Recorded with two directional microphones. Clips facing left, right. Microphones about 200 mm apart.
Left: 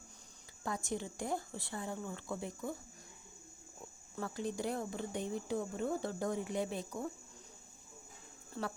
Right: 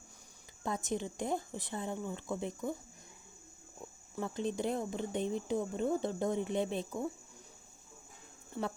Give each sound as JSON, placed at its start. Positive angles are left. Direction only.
{"t": 0.6, "sound": "speech", "side_deg": -20}
{"t": 4.1, "sound": "speech", "side_deg": -20}
{"t": 8.6, "sound": "speech", "side_deg": -10}